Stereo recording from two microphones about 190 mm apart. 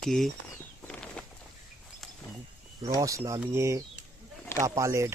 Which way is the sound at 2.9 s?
15° right (ahead or behind).